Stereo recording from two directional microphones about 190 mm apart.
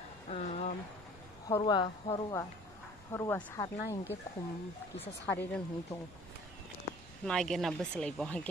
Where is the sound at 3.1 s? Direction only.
15° left (ahead or behind).